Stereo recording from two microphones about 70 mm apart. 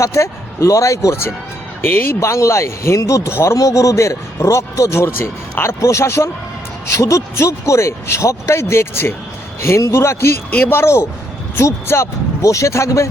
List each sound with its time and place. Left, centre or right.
0.0 s speech: left
1.8 s a man's voice: left